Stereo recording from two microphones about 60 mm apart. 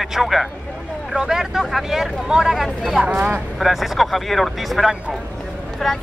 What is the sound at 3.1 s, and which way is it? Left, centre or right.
Speech, right.